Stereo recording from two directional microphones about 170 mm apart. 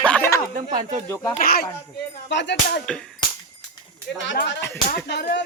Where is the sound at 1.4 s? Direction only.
60° left (ahead or behind).